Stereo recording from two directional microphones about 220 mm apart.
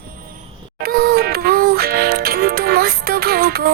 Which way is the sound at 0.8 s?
45° right (ahead or behind).